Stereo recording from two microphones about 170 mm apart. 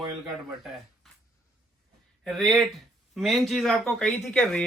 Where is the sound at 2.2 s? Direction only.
Centre (ahead or behind).